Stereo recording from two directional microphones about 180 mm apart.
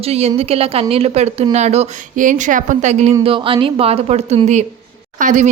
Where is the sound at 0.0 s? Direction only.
35° right (ahead or behind).